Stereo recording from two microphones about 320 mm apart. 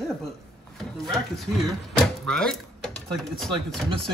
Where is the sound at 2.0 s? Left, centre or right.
Centre.